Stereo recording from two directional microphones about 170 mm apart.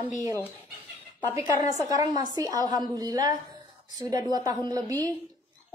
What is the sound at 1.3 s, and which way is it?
A woman's voice, 20° right (ahead or behind).